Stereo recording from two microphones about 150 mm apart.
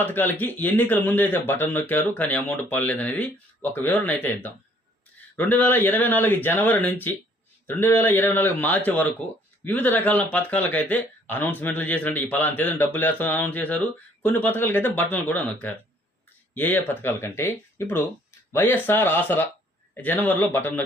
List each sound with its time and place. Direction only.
0.0 s speech: 15° left (ahead or behind)
5.4 s speech: 10° left (ahead or behind)